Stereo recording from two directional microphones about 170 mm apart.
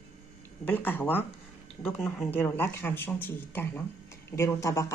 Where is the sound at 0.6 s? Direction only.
10° left (ahead or behind).